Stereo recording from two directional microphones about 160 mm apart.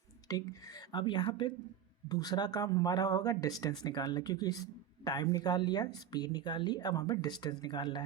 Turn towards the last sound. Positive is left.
turn(degrees=30)  # may be behind; listen again after turning